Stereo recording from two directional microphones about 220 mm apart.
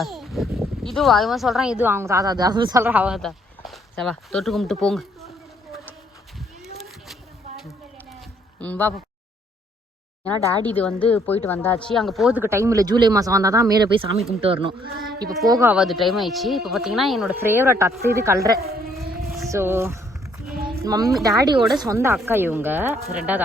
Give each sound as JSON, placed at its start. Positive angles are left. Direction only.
{"t": 0.0, "sound": "speech", "side_deg": 0}
{"t": 6.7, "sound": "a sound", "side_deg": 0}
{"t": 10.7, "sound": "a woman's voice", "side_deg": 5}
{"t": 14.9, "sound": "speech", "side_deg": -45}
{"t": 15.4, "sound": "speech", "side_deg": -15}
{"t": 15.7, "sound": "speech", "side_deg": 0}